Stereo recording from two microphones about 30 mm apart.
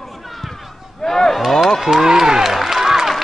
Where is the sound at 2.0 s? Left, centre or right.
Centre.